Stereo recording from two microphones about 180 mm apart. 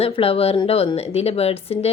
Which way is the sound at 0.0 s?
35° left (ahead or behind).